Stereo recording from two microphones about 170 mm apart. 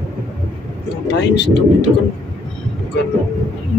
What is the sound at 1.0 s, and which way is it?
Speech, 90° left.